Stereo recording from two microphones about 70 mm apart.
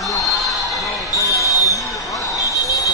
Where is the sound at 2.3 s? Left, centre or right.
Left.